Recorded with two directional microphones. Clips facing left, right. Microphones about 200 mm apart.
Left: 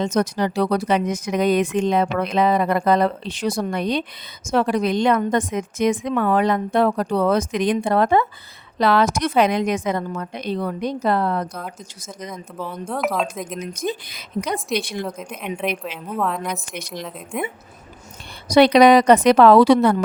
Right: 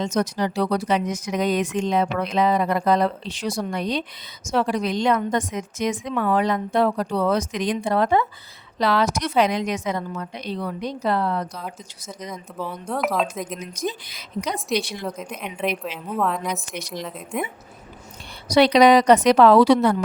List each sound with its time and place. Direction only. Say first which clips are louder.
0.0 s a woman's voice: left 3 dB; 55° left (ahead or behind)
12.3 s a woman's voice: even; 5° right (ahead or behind)
13.7 s a woman's voice: left 2 dB; 55° left (ahead or behind)
15.0 s a woman's voice: left 1 dB; centre (ahead or behind)
18.4 s speech: left 3 dB; 55° left (ahead or behind)